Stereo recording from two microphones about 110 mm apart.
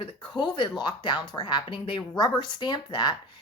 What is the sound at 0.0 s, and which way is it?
Speech, 45° left (ahead or behind).